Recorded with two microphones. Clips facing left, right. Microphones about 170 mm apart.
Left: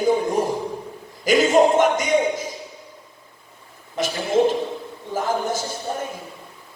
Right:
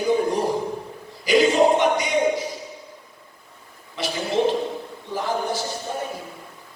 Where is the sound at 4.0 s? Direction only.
45° left (ahead or behind).